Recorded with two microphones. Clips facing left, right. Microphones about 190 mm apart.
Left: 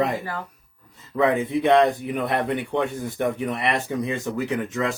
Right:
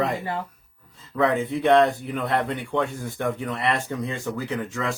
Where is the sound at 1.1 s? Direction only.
20° left (ahead or behind).